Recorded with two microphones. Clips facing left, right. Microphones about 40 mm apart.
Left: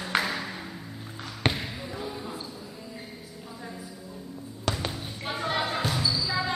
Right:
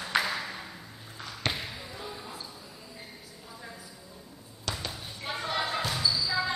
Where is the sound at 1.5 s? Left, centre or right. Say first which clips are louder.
Left 4 dB; centre.